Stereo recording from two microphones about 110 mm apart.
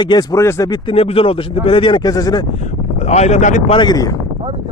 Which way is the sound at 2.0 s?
35° left (ahead or behind).